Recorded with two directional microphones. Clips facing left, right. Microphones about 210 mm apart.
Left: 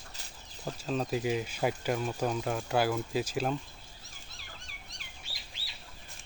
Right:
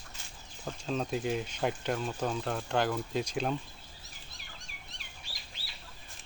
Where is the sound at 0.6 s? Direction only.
5° left (ahead or behind).